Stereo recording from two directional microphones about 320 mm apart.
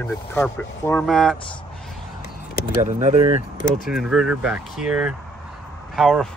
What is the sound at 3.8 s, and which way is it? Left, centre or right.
Speech, centre.